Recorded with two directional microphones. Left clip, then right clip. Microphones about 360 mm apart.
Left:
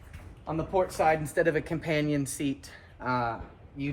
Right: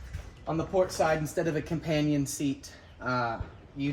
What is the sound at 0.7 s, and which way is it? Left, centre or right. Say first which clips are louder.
Speech: left 1 dB; centre.